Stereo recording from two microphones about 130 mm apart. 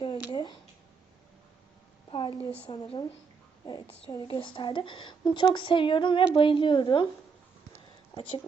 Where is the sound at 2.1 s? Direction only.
40° left (ahead or behind).